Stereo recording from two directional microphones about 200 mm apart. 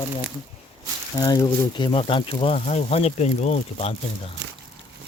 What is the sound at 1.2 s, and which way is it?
Speech, 20° left (ahead or behind).